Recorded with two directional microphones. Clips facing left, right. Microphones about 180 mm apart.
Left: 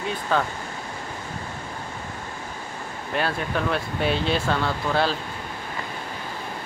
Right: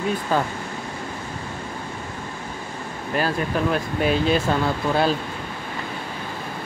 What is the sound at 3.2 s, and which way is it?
Speech, 5° right (ahead or behind).